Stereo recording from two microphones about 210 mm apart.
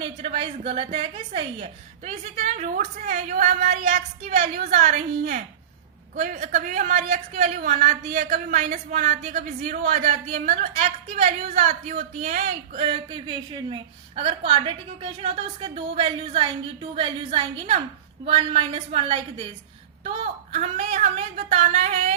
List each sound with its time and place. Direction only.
0.0 s a woman's voice: 30° right (ahead or behind)